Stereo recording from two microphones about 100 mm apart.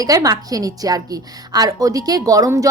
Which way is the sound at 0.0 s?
35° right (ahead or behind).